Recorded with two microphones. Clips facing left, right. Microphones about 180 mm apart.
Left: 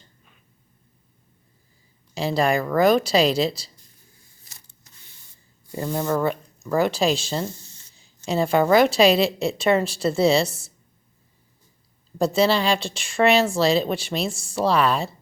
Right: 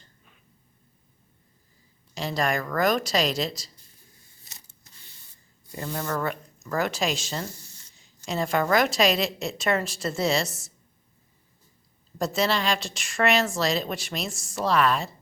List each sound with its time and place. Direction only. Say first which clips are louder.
2.1 s a woman's voice: left 6 dB; 30° left (ahead or behind)
5.8 s speech: left 6 dB; 20° left (ahead or behind)
6.2 s a woman's voice: left 6 dB; 30° left (ahead or behind)
12.1 s a woman's voice: left 6 dB; 30° left (ahead or behind)